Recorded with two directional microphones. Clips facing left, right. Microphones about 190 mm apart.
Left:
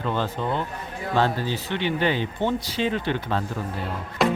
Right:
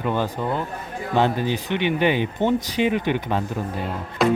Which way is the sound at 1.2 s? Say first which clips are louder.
Right 3 dB; 15° right (ahead or behind).